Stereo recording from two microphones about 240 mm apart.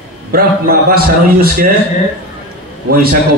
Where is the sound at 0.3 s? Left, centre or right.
Right.